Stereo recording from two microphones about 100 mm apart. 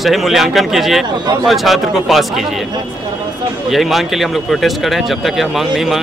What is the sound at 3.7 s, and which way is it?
Speech, centre (ahead or behind).